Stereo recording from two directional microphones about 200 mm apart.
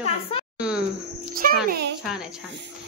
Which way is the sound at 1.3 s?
45° right (ahead or behind).